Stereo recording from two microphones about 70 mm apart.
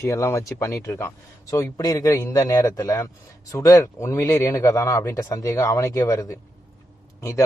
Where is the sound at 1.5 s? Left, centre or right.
Left.